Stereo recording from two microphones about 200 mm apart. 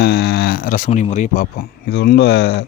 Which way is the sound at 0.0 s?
50° left (ahead or behind).